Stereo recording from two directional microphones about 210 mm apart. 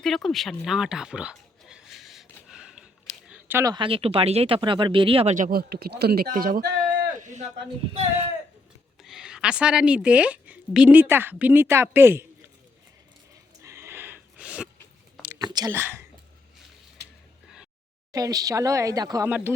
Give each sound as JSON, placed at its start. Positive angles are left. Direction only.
{"t": 0.0, "sound": "speech", "side_deg": 0}
{"t": 9.0, "sound": "a woman's voice", "side_deg": 0}
{"t": 13.6, "sound": "a sound", "side_deg": -10}
{"t": 15.2, "sound": "whispering", "side_deg": -10}
{"t": 15.5, "sound": "speech", "side_deg": -15}
{"t": 17.0, "sound": "a sound", "side_deg": -55}
{"t": 18.1, "sound": "speech", "side_deg": -15}